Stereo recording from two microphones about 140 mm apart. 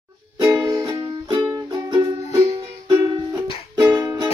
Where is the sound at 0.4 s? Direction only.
25° right (ahead or behind).